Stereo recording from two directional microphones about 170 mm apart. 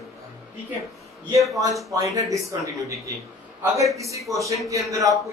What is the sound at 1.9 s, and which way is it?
Speech, 20° right (ahead or behind).